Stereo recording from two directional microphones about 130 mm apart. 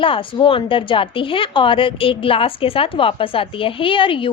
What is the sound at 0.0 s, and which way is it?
Speech, 40° left (ahead or behind).